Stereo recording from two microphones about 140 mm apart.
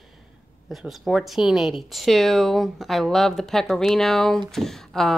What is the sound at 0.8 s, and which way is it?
A woman's voice, centre (ahead or behind).